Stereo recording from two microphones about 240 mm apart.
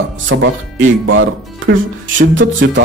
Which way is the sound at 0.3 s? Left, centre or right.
Right.